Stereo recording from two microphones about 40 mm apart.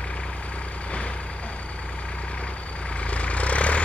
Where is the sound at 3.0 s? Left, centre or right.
Left.